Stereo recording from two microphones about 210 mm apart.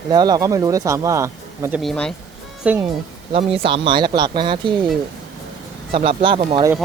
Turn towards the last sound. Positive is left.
turn(degrees=-25)  # may be behind; listen again after turning